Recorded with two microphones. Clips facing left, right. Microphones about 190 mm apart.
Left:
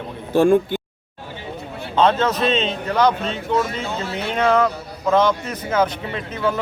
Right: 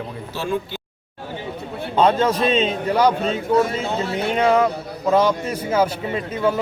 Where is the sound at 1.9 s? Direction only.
10° right (ahead or behind).